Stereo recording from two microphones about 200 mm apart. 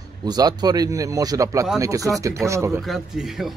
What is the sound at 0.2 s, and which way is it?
Speech, 20° right (ahead or behind).